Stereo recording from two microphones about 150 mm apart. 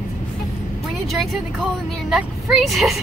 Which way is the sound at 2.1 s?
Centre (ahead or behind).